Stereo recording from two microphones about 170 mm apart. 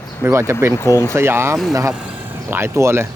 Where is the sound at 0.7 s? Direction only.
15° left (ahead or behind).